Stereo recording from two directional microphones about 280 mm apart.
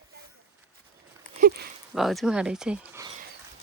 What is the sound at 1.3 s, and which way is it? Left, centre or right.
Speech, right.